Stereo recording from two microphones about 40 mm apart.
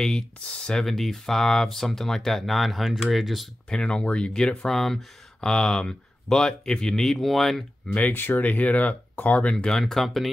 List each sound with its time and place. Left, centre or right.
0.5 s speech: left
0.8 s speech: centre
3.7 s speech: left
4.6 s speech: centre
7.0 s speech: centre
8.0 s speech: left
9.7 s speech: centre